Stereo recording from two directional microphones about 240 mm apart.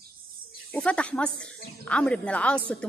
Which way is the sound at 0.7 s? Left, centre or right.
Centre.